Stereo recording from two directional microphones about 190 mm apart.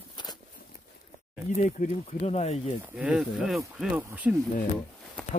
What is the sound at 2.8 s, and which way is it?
Speech, 5° right (ahead or behind).